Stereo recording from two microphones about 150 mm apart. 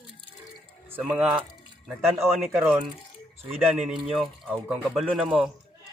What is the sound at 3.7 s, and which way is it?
Speech, centre (ahead or behind).